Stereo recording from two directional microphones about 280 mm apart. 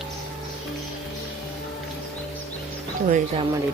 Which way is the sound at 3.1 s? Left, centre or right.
Centre.